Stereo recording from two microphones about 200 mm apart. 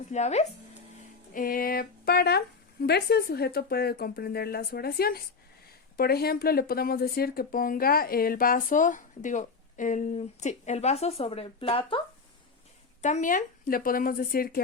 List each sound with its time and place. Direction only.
0.1 s speech: 35° left (ahead or behind)
13.0 s speech: 35° left (ahead or behind)